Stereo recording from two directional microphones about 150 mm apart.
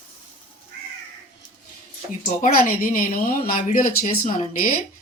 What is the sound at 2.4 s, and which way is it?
Speech, 65° left (ahead or behind).